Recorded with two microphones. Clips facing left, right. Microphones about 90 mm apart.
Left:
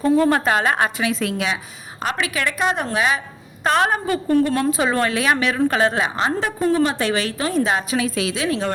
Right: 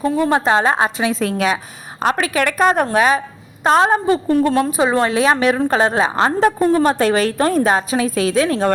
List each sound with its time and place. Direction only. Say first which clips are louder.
0.0 s a woman's voice: even; 20° right (ahead or behind); by 3.2 s 45° right (ahead or behind)
3.6 s a woman's voice: right 5 dB; 25° right (ahead or behind); by 8.7 s 40° right (ahead or behind)